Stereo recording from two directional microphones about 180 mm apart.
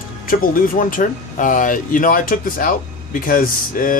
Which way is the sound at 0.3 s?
50° left (ahead or behind).